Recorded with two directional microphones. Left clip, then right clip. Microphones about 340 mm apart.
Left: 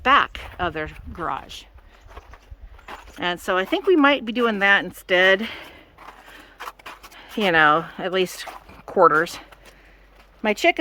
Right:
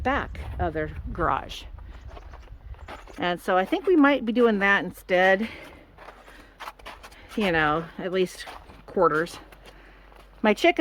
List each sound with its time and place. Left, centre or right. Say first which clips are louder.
0.0 s speech: left 10 dB; centre
2.8 s speech: left 2 dB; centre